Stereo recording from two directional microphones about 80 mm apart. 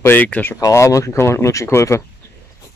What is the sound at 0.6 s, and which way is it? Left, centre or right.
Speech, left.